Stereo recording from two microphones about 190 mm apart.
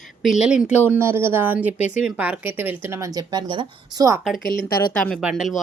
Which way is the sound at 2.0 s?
5° right (ahead or behind).